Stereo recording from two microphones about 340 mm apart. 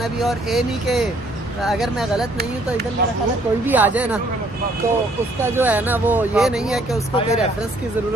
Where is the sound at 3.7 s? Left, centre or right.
Centre.